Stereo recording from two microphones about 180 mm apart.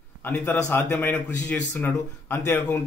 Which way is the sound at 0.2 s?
10° left (ahead or behind).